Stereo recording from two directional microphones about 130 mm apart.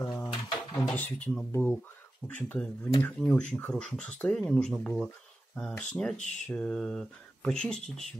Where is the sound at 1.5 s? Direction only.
15° left (ahead or behind).